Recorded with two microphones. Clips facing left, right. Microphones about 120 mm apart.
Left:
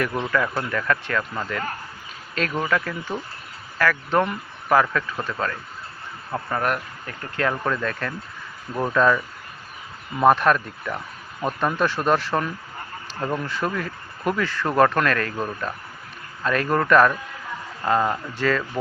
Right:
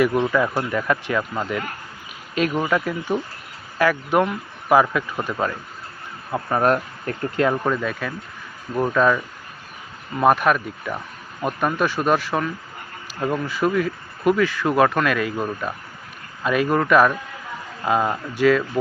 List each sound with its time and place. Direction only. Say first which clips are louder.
0.0 s speech: right 5 dB; 15° right (ahead or behind)
6.7 s speech: right 6 dB; 40° right (ahead or behind)
7.3 s speech: right 3 dB; 15° right (ahead or behind)
10.2 s speech: even; 5° right (ahead or behind)